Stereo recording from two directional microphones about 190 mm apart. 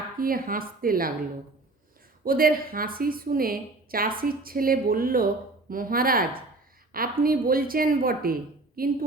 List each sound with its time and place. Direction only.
0.2 s a woman's voice: 50° right (ahead or behind)
2.2 s a woman's voice: 50° right (ahead or behind)